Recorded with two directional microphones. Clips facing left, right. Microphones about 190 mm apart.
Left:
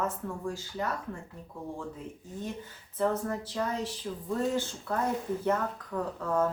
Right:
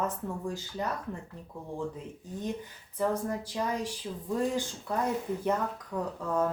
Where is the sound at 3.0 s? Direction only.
15° right (ahead or behind).